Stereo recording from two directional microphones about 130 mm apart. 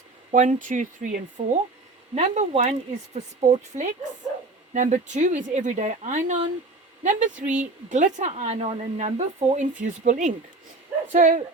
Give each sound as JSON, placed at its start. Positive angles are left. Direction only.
{"t": 0.3, "sound": "speech", "side_deg": -80}
{"t": 1.4, "sound": "a woman's voice", "side_deg": -55}
{"t": 9.8, "sound": "a woman's voice", "side_deg": -80}